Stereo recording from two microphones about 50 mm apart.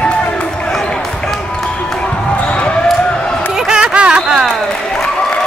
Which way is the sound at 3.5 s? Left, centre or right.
Centre.